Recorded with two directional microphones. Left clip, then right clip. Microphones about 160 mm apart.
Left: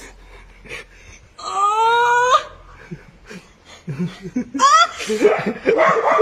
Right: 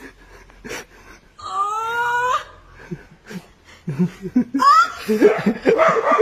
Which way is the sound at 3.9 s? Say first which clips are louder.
Right 4 dB; 35° right (ahead or behind).